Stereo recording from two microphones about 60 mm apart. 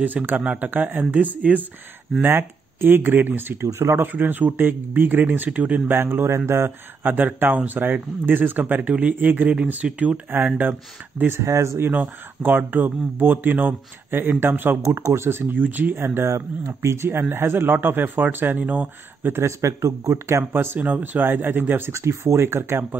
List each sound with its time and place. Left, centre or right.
0.0 s speech: right
2.2 s speech: right
3.6 s speech: right
4.0 s speech: right
5.9 s speech: right
7.0 s speech: right
11.3 s speech: right
11.9 s speech: right
15.0 s speech: right
19.6 s speech: right
20.5 s speech: right
21.9 s speech: right